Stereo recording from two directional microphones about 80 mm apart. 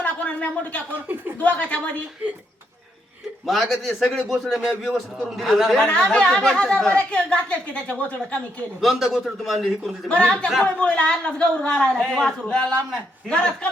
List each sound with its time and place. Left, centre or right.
0.0 s a sound: centre
1.4 s speech: centre
3.4 s a man's voice: centre
5.8 s speech: centre
6.3 s a man's voice: centre
8.8 s a man's voice: centre
10.1 s a man's voice: centre